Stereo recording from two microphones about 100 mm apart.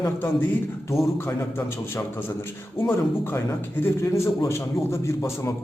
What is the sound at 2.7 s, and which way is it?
A man's voice, 25° left (ahead or behind).